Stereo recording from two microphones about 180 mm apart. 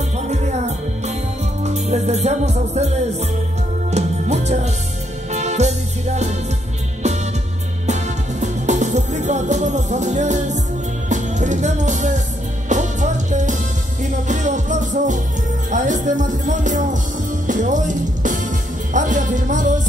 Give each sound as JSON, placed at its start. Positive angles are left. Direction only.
{"t": 0.3, "sound": "music", "side_deg": -40}
{"t": 7.8, "sound": "music", "side_deg": -40}